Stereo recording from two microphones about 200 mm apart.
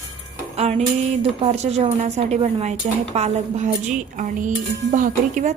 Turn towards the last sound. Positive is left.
turn(degrees=-40)  # may be behind; listen again after turning